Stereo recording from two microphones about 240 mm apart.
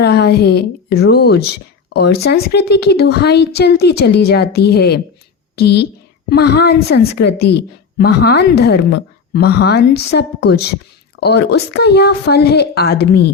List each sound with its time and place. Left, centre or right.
0.0 s a woman's voice: left